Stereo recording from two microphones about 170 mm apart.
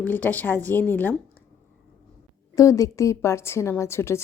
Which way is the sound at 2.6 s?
20° left (ahead or behind).